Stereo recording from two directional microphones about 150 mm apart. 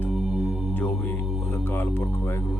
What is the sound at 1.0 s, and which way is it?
Speech, 10° left (ahead or behind).